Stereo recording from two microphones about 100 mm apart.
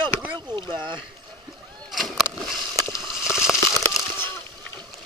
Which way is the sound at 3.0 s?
5° right (ahead or behind).